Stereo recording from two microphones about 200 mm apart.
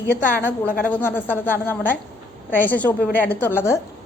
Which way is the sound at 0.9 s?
10° left (ahead or behind).